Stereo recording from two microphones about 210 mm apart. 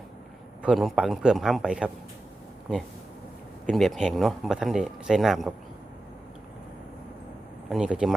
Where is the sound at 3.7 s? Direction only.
Centre (ahead or behind).